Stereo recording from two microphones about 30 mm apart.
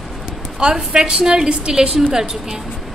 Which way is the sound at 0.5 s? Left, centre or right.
Right.